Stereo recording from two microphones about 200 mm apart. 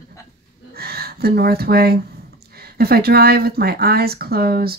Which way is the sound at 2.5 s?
50° right (ahead or behind).